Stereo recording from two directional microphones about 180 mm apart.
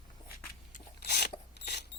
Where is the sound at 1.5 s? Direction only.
65° left (ahead or behind).